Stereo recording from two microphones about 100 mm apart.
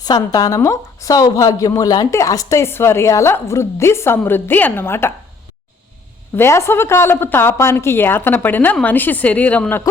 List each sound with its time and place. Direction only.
0.0 s a woman's voice: 40° left (ahead or behind); by 5.1 s 25° left (ahead or behind)
6.3 s a woman's voice: 25° left (ahead or behind)